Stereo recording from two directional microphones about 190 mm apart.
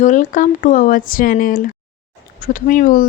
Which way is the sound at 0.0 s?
40° left (ahead or behind).